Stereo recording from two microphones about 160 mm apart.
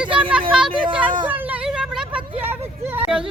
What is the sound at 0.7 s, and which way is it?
Speech, 30° right (ahead or behind).